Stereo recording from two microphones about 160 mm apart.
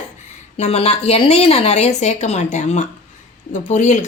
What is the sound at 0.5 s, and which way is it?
Speech, 40° left (ahead or behind).